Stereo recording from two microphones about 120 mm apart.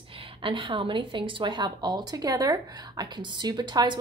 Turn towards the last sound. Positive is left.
turn(degrees=-35)  # may be behind; listen again after turning